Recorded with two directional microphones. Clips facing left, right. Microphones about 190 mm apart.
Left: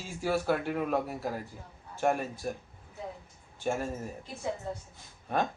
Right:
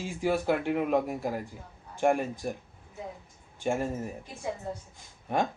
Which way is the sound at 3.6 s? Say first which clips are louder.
Right 2 dB; 15° right (ahead or behind).